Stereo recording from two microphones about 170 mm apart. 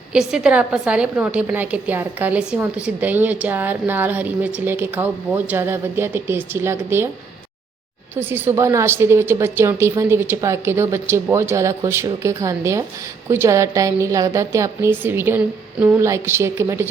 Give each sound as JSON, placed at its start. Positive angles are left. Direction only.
{"t": 0.1, "sound": "a woman's voice", "side_deg": -5}
{"t": 8.1, "sound": "a woman's voice", "side_deg": -10}